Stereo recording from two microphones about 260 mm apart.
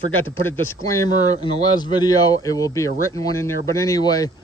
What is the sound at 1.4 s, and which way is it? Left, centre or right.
Speech, centre.